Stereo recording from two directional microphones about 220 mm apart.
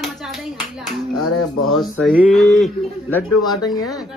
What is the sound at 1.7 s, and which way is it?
Speech, centre (ahead or behind).